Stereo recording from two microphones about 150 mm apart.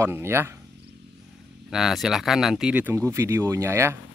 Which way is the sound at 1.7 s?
5° right (ahead or behind).